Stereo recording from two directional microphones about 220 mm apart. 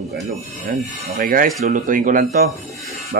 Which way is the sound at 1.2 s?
40° right (ahead or behind).